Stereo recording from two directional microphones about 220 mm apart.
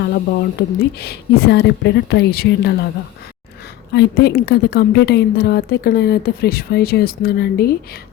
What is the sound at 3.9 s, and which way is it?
A woman's voice, 45° left (ahead or behind).